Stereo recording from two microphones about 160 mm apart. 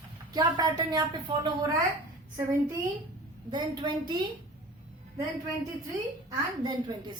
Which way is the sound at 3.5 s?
30° right (ahead or behind).